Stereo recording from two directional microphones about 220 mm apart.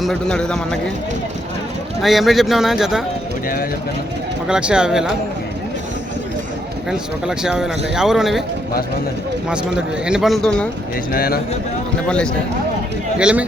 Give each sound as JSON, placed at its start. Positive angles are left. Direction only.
{"t": 0.0, "sound": "a man's voice", "side_deg": 5}
{"t": 2.0, "sound": "a man's voice", "side_deg": 0}
{"t": 4.4, "sound": "a man's voice", "side_deg": -5}
{"t": 6.9, "sound": "a man's voice", "side_deg": -5}
{"t": 9.5, "sound": "a man's voice", "side_deg": -5}
{"t": 11.1, "sound": "a man's voice", "side_deg": 40}
{"t": 12.0, "sound": "a man's voice", "side_deg": 5}